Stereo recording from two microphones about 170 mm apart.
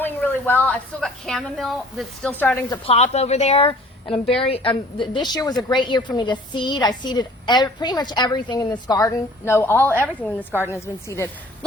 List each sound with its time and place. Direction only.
0.0 s a woman's voice: 10° left (ahead or behind)
2.3 s a woman's voice: 10° left (ahead or behind)
2.6 s a woman's voice: 35° left (ahead or behind); by 11.3 s 15° left (ahead or behind)